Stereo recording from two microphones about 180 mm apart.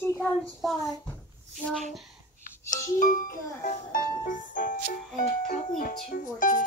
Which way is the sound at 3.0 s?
50° left (ahead or behind).